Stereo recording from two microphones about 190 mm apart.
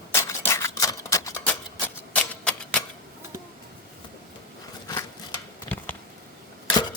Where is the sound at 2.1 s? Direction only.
5° left (ahead or behind).